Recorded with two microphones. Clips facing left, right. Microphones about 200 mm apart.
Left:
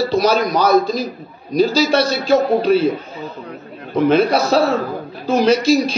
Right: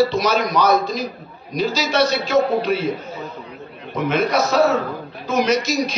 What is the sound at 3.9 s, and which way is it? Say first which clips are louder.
A man's voice: left 5 dB; 30° left (ahead or behind).